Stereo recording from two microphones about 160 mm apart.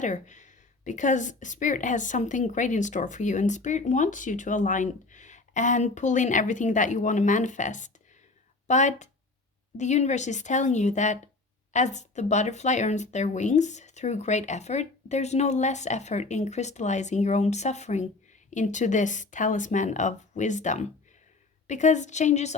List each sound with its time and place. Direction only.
0.0 s a woman's voice: 50° left (ahead or behind)